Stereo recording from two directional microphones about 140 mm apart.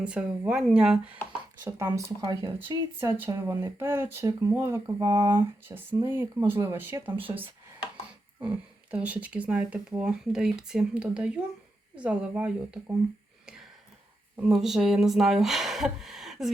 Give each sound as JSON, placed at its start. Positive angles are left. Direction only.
{"t": 0.0, "sound": "speech", "side_deg": -10}
{"t": 1.6, "sound": "speech", "side_deg": -20}
{"t": 2.2, "sound": "speech", "side_deg": -30}
{"t": 3.0, "sound": "speech", "side_deg": -15}
{"t": 8.4, "sound": "speech", "side_deg": -10}
{"t": 13.4, "sound": "a sound", "side_deg": -5}
{"t": 14.3, "sound": "speech", "side_deg": -5}